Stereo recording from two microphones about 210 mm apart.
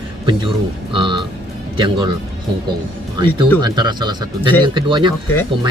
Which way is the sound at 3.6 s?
20° right (ahead or behind).